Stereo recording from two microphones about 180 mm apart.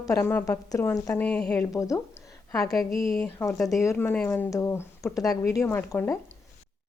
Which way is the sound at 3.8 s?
15° left (ahead or behind).